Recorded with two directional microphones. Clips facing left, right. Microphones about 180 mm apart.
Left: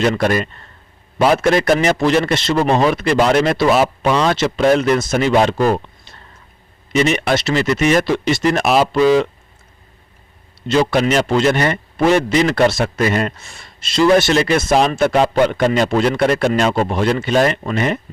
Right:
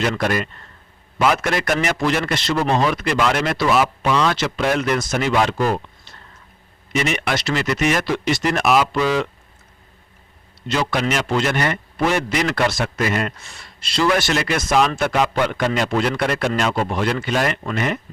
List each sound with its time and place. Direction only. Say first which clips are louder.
0.2 s speech: left 4 dB; 35° left (ahead or behind)
4.4 s speech: left 6 dB; 25° left (ahead or behind)
6.9 s speech: left 6 dB; 25° left (ahead or behind)
10.7 s speech: left 6 dB; 30° left (ahead or behind)